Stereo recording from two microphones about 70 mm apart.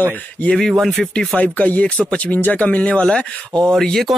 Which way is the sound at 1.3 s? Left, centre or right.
Left.